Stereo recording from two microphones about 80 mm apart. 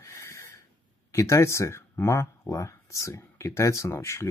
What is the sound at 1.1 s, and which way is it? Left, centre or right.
Speech, left.